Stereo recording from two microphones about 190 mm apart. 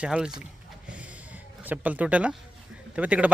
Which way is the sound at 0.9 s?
5° right (ahead or behind).